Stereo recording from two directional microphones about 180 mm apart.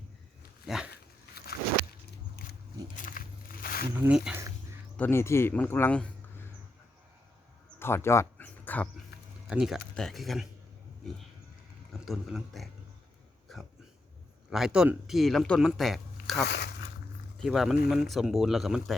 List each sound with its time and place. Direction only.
0.6 s speech: 5° right (ahead or behind)
1.5 s walk: 60° left (ahead or behind)
2.9 s a sound: 50° left (ahead or behind)
4.0 s speech: 5° right (ahead or behind)
4.9 s speech: 10° left (ahead or behind)
7.8 s a sound: 15° left (ahead or behind)
9.5 s speech: centre (ahead or behind)
11.9 s speech: centre (ahead or behind)
13.5 s a sound: centre (ahead or behind)
14.5 s speech: 5° right (ahead or behind)
17.3 s speech: centre (ahead or behind)